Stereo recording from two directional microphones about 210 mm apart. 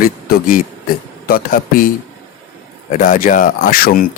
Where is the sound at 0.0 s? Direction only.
40° left (ahead or behind).